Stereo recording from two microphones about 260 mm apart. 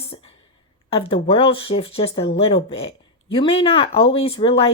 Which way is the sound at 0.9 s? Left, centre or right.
Left.